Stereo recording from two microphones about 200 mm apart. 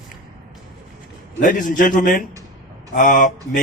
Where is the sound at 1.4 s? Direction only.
40° left (ahead or behind).